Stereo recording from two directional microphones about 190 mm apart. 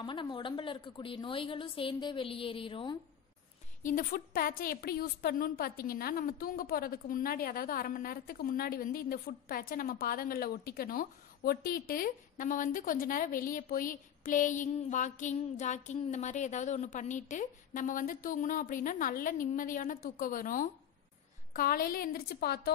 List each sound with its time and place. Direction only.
0.0 s a woman's voice: 25° left (ahead or behind)
3.8 s a woman's voice: 45° left (ahead or behind)